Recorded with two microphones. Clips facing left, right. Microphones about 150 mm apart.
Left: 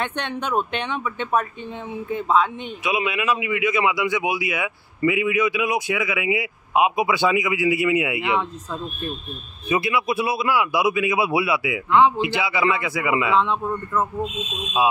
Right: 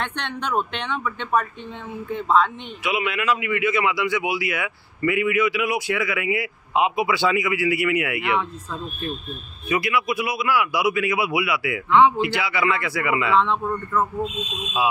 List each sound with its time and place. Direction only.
0.2 s speech: 10° left (ahead or behind)
2.8 s a man's voice: 20° left (ahead or behind)
9.7 s a man's voice: 25° left (ahead or behind)
13.3 s speech: 5° left (ahead or behind)